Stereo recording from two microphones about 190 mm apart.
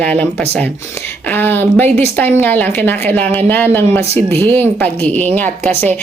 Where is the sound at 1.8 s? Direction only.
35° right (ahead or behind).